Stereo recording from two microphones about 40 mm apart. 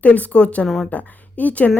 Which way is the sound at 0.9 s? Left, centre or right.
Left.